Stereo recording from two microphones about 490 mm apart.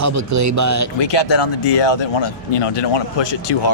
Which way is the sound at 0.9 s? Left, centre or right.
Left.